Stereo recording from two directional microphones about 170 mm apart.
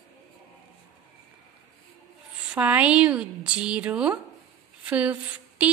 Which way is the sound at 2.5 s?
10° right (ahead or behind).